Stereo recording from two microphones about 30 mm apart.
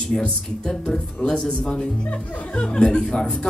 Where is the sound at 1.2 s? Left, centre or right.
Left.